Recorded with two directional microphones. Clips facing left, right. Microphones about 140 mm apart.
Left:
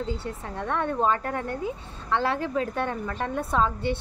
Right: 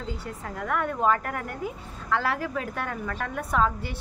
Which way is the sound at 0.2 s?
25° left (ahead or behind).